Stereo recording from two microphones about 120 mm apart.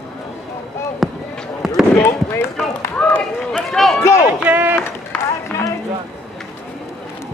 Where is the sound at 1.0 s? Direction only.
Centre (ahead or behind).